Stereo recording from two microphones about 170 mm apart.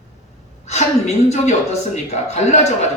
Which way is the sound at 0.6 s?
40° left (ahead or behind).